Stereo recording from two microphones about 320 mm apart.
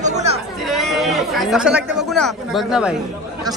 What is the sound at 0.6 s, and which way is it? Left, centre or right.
Speech, centre.